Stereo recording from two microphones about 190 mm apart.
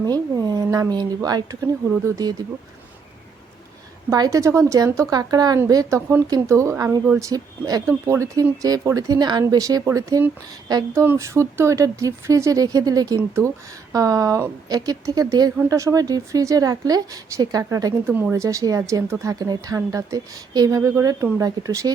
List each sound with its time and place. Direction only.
0.0 s speech: 20° right (ahead or behind)
4.1 s speech: 15° right (ahead or behind)